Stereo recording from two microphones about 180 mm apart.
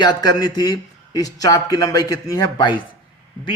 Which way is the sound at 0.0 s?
25° left (ahead or behind).